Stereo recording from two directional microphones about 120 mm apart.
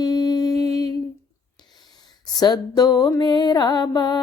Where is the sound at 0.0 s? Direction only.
35° left (ahead or behind).